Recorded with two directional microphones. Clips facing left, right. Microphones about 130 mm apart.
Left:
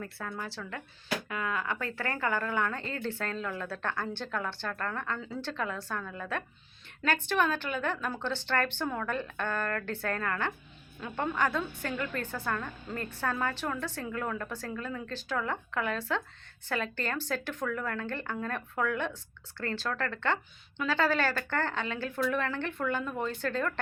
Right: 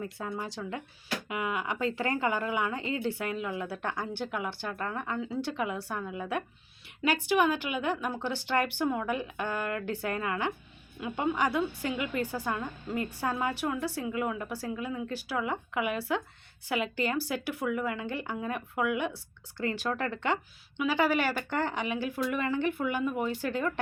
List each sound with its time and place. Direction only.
0.0 s a woman's voice: 20° right (ahead or behind)